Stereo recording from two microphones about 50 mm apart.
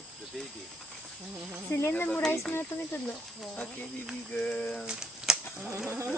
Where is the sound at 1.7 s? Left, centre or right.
Left.